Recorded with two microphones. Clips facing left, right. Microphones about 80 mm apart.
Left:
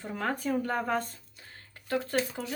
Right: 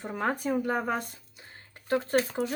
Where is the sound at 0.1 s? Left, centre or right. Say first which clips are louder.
Right 2 dB; right.